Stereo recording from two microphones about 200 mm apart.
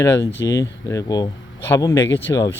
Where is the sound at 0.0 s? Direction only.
15° left (ahead or behind).